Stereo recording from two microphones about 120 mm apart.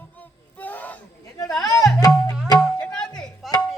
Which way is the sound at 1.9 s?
30° left (ahead or behind).